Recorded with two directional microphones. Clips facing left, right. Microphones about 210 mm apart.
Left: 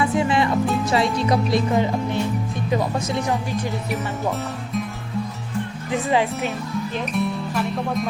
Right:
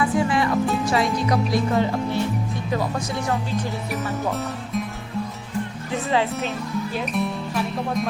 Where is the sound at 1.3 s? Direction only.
20° left (ahead or behind).